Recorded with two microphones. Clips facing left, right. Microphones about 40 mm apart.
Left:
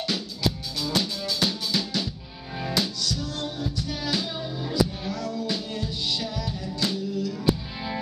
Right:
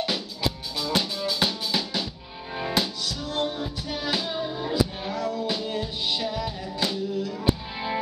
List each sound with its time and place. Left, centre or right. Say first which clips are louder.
0.7 s music: right 1 dB; centre